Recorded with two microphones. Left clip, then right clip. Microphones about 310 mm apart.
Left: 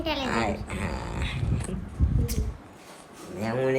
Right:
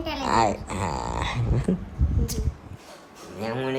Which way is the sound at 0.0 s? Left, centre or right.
Centre.